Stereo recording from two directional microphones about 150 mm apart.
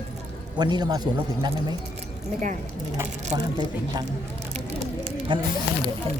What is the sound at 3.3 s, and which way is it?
Speech, 45° right (ahead or behind).